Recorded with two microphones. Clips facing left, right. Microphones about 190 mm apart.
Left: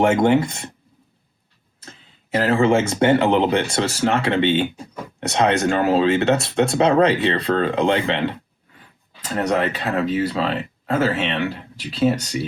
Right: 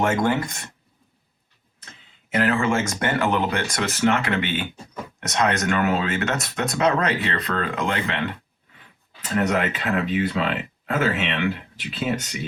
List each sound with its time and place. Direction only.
0.0 s speech: 25° left (ahead or behind)
2.3 s speech: 30° left (ahead or behind)